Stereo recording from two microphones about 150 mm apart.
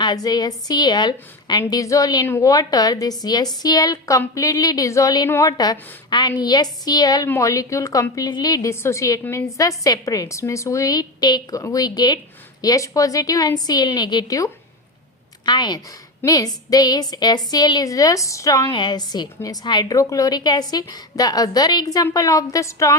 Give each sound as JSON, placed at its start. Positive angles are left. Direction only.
{"t": 0.0, "sound": "a woman's voice", "side_deg": 25}